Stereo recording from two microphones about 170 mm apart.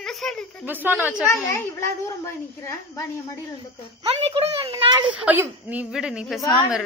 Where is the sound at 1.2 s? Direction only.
20° left (ahead or behind).